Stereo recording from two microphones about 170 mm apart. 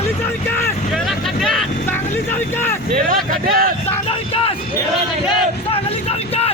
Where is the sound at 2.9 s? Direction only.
55° right (ahead or behind).